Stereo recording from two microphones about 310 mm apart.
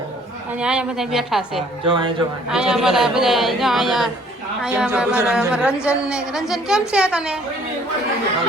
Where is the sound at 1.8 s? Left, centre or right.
Centre.